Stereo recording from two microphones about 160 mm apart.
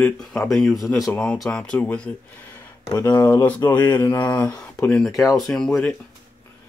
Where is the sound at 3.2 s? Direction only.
10° left (ahead or behind).